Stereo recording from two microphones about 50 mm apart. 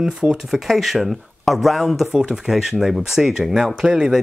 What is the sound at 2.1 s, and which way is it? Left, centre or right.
Speech, centre.